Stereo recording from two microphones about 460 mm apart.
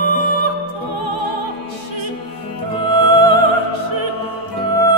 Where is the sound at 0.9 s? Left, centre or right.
Right.